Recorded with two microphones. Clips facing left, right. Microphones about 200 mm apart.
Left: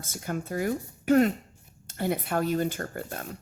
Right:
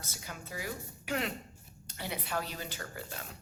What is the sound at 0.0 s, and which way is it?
Speech, 50° left (ahead or behind).